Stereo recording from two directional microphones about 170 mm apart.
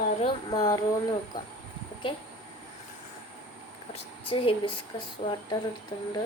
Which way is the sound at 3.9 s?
30° left (ahead or behind).